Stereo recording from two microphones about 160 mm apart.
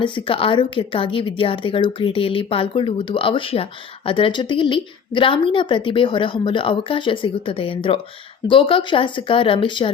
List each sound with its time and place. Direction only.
0.0 s a woman's voice: 35° left (ahead or behind)